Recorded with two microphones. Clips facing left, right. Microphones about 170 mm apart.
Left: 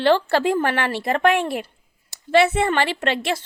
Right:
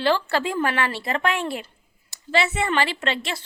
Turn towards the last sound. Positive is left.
turn(degrees=55)  # may be behind; listen again after turning